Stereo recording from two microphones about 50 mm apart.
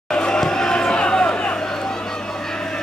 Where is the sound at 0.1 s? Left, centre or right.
Centre.